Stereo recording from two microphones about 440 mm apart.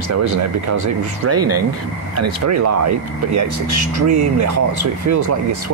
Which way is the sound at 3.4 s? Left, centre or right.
Right.